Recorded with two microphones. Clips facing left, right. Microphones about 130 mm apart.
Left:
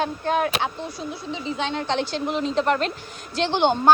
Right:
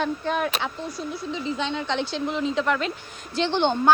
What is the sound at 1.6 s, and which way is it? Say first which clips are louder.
Speech: left 4 dB; 60° left (ahead or behind).